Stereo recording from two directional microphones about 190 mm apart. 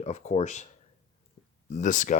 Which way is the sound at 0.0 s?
35° left (ahead or behind).